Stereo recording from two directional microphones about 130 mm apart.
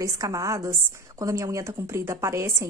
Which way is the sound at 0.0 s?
25° right (ahead or behind).